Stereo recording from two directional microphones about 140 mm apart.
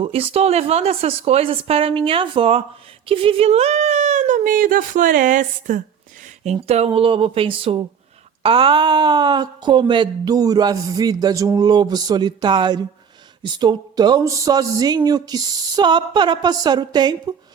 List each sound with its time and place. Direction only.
0.0 s a woman's voice: 45° right (ahead or behind); by 5.8 s 70° right (ahead or behind)
6.4 s speech: 50° right (ahead or behind); by 17.2 s 30° right (ahead or behind)